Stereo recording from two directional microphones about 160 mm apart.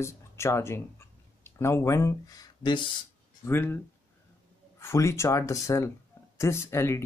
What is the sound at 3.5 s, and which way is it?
Speech, 15° left (ahead or behind).